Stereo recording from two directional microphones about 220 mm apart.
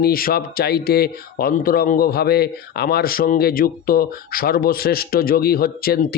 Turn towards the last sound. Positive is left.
turn(degrees=45)  # may be behind; listen again after turning